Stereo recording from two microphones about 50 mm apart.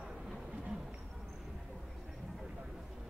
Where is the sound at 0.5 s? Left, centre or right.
Right.